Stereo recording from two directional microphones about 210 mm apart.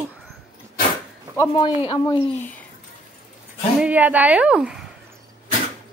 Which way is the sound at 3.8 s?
5° right (ahead or behind).